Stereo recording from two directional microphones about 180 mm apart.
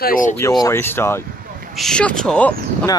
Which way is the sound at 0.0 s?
50° left (ahead or behind).